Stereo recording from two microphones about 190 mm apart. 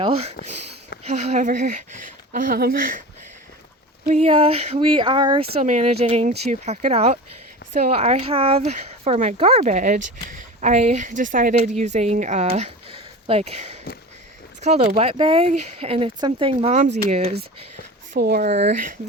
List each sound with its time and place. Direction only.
0.0 s speech: 30° right (ahead or behind); by 3.0 s 50° right (ahead or behind)
4.0 s speech: 35° right (ahead or behind)
18.1 s speech: 50° right (ahead or behind)
18.4 s speech: 35° right (ahead or behind)